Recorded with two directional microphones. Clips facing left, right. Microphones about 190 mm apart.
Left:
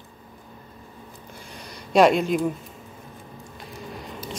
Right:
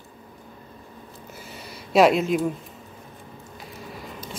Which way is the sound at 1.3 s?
5° right (ahead or behind).